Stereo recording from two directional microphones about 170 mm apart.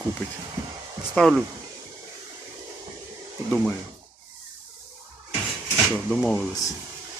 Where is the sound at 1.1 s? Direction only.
Centre (ahead or behind).